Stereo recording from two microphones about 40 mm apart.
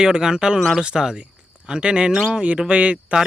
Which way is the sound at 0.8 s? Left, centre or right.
Centre.